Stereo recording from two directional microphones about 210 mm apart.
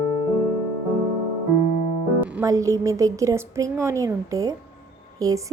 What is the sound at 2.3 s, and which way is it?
A woman's voice, 15° right (ahead or behind).